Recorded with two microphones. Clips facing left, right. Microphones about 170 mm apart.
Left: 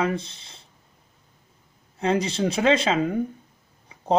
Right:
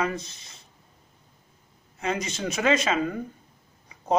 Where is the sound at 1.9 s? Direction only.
30° left (ahead or behind).